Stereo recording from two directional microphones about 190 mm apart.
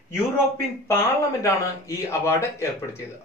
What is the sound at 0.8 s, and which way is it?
Speech, 15° left (ahead or behind).